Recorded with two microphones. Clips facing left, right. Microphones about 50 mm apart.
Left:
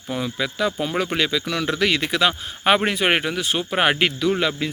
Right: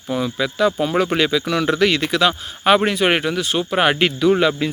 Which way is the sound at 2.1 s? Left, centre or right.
Centre.